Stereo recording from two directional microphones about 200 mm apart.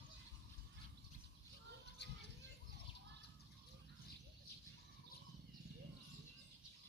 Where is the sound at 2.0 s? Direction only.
60° left (ahead or behind).